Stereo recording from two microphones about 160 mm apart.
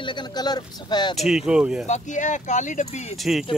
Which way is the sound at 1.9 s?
50° left (ahead or behind).